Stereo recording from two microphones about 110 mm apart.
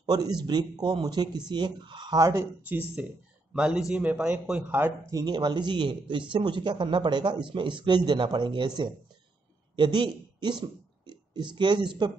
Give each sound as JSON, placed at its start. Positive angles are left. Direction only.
{"t": 0.0, "sound": "a man's voice", "side_deg": -35}
{"t": 2.1, "sound": "speech", "side_deg": -30}
{"t": 3.5, "sound": "a man's voice", "side_deg": -10}
{"t": 5.1, "sound": "a man's voice", "side_deg": -40}